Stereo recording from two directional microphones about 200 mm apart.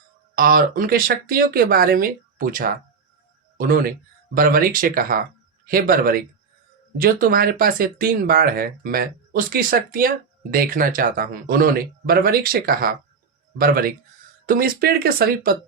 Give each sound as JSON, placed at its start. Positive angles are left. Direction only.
{"t": 0.3, "sound": "speech", "side_deg": -45}